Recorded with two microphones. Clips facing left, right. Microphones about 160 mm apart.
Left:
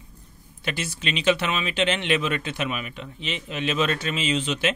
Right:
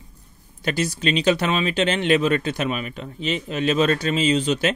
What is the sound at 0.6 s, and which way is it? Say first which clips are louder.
Speech: right 7 dB; 40° right (ahead or behind).